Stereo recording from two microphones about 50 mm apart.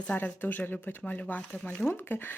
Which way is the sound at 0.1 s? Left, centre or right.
Left.